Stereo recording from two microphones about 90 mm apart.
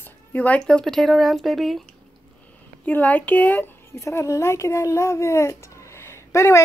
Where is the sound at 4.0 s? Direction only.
30° left (ahead or behind).